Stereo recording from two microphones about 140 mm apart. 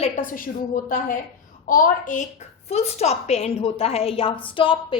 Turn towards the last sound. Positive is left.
turn(degrees=35)  # may be behind; listen again after turning